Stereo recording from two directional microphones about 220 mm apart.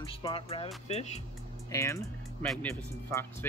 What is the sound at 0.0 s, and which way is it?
Speech, 20° left (ahead or behind).